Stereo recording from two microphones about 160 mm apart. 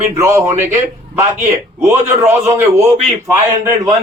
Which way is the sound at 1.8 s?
15° right (ahead or behind).